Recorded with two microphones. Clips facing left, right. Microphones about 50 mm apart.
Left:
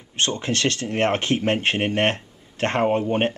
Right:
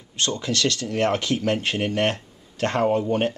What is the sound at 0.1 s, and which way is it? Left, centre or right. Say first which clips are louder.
Speech: left 1 dB; left.